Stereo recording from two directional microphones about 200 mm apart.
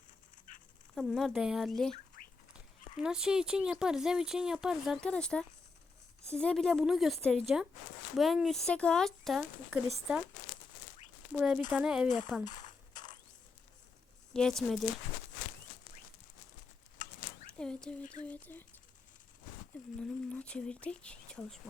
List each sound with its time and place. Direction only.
0.9 s speech: centre (ahead or behind)
2.2 s fowl: 40° left (ahead or behind)
3.0 s speech: 5° right (ahead or behind)
11.3 s speech: 5° right (ahead or behind)
12.9 s mechanisms: 20° left (ahead or behind)
14.3 s speech: centre (ahead or behind)
17.6 s speech: 5° left (ahead or behind)
20.0 s speech: 5° left (ahead or behind)